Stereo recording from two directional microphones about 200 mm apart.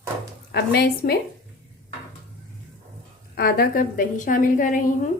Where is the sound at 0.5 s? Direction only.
50° left (ahead or behind).